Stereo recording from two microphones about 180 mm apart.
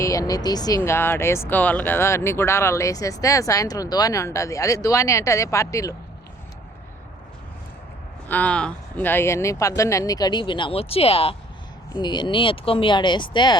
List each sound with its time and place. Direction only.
0.0 s speech: 20° left (ahead or behind)
8.3 s speech: 10° left (ahead or behind); by 13.6 s 25° left (ahead or behind)